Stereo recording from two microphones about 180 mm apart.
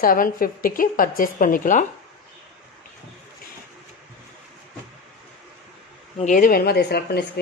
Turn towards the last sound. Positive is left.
turn(degrees=65)  # may be behind; listen again after turning